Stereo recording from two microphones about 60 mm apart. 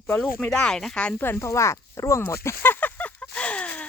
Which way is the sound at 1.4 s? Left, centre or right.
Left.